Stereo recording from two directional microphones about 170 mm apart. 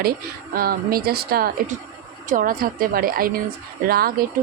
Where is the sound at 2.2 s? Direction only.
50° right (ahead or behind).